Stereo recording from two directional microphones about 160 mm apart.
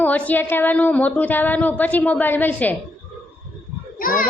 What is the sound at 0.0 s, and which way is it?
A woman's voice, 10° left (ahead or behind).